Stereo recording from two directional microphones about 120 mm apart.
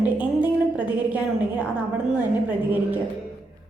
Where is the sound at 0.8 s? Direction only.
10° right (ahead or behind).